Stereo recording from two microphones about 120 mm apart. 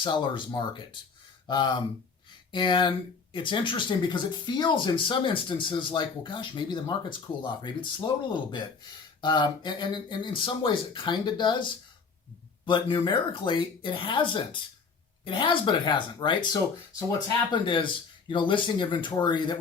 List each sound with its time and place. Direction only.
0.0 s speech: 40° left (ahead or behind)